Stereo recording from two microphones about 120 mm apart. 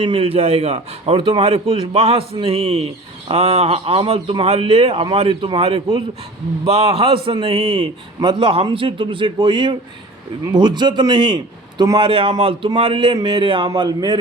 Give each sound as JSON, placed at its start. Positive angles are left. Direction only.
{"t": 0.0, "sound": "a man's voice", "side_deg": -50}
{"t": 8.2, "sound": "speech", "side_deg": -40}